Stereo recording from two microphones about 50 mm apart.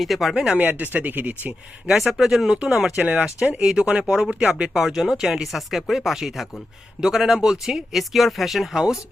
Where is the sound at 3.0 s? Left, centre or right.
Right.